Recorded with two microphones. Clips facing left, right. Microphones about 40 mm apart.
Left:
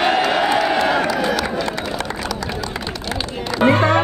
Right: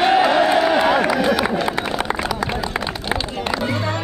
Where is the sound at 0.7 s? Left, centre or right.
Centre.